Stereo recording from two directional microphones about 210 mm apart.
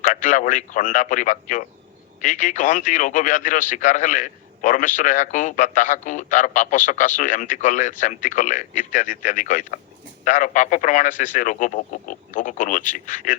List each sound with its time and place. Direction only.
0.0 s speech: 40° left (ahead or behind)